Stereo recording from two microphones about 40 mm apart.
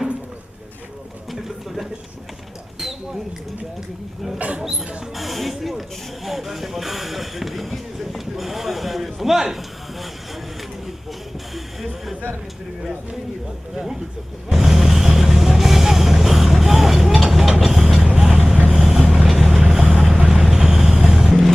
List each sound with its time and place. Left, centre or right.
1.3 s speech: centre
2.7 s a sound: centre
4.4 s speech: right
4.6 s speech: centre
14.5 s music: centre
17.6 s vehicle: centre
19.3 s vehicle: centre
20.2 s boat: centre